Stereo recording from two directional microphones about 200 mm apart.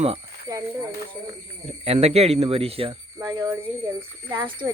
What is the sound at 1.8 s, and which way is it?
Speech, 30° right (ahead or behind).